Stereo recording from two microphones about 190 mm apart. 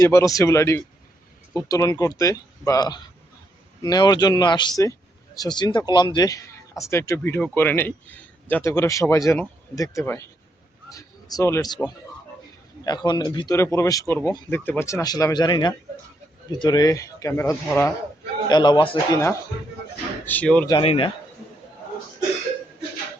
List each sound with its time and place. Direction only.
0.0 s a man's voice: 15° left (ahead or behind)
12.8 s speech: 20° left (ahead or behind)
20.7 s speech: 25° left (ahead or behind)